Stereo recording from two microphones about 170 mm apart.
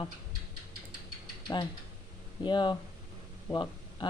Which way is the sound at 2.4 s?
25° left (ahead or behind).